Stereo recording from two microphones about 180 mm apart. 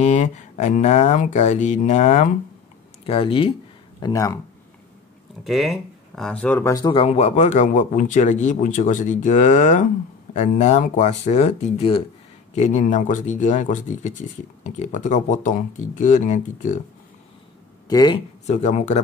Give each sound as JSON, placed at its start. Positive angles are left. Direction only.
{"t": 0.0, "sound": "speech", "side_deg": 40}
{"t": 4.0, "sound": "speech", "side_deg": 15}
{"t": 5.4, "sound": "speech", "side_deg": 0}
{"t": 17.8, "sound": "speech", "side_deg": 20}
{"t": 18.5, "sound": "speech", "side_deg": 40}